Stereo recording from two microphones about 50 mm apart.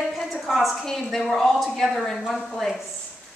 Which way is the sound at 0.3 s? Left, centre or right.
Centre.